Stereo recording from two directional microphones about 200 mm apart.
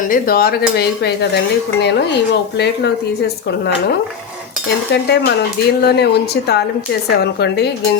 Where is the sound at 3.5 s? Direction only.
55° left (ahead or behind).